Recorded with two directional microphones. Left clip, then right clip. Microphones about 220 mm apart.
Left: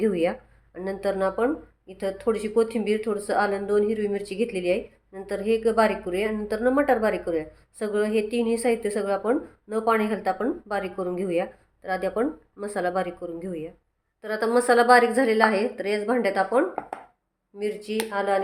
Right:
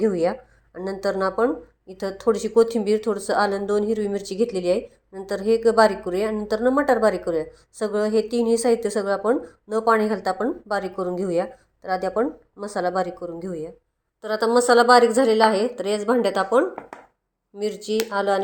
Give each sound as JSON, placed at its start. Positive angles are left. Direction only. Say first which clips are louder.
{"t": 0.0, "sound": "a woman's voice", "louder": "right 2 dB", "side_deg": -10}